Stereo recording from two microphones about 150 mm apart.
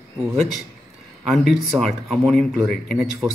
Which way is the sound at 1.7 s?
Centre (ahead or behind).